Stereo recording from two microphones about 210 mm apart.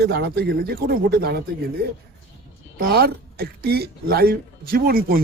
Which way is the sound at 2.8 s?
45° right (ahead or behind).